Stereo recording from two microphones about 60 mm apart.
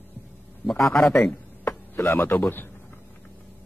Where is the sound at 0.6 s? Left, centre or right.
Centre.